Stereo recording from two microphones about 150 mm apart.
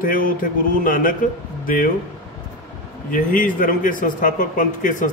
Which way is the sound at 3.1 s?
65° left (ahead or behind).